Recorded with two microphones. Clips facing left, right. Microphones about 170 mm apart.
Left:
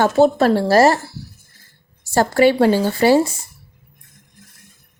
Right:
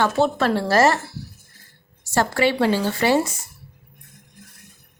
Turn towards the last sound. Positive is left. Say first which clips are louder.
# left 5 dB
turn(degrees=35)  # may be behind; listen again after turning